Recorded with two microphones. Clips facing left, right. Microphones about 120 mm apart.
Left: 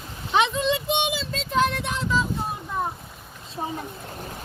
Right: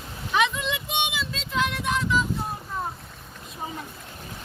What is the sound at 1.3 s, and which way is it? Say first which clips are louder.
Child singing: left 4 dB; 40° left (ahead or behind).